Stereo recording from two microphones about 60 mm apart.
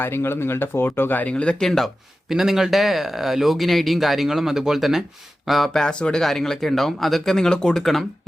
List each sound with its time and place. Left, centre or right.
0.0 s speech: left
1.3 s speech: centre
2.3 s speech: centre